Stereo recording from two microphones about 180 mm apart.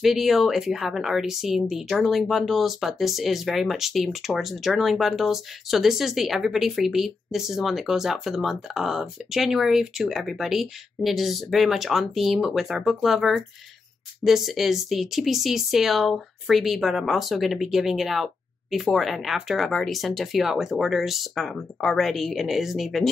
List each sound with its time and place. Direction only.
0.0 s speech: centre (ahead or behind)